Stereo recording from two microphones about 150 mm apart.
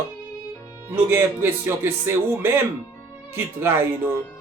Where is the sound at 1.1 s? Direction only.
15° right (ahead or behind).